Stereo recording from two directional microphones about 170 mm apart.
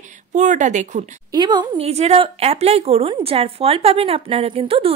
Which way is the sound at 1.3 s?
25° right (ahead or behind).